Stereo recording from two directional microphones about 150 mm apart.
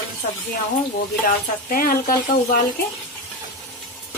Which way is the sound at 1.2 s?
70° left (ahead or behind).